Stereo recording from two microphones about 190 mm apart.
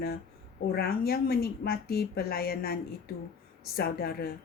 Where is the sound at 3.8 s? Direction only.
55° left (ahead or behind).